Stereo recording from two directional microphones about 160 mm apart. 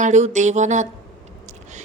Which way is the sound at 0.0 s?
50° right (ahead or behind).